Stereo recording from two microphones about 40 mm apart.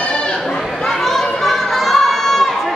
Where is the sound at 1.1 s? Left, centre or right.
Centre.